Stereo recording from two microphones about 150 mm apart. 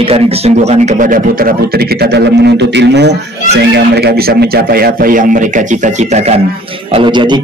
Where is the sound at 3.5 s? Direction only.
90° right; by 6.2 s 55° right (ahead or behind).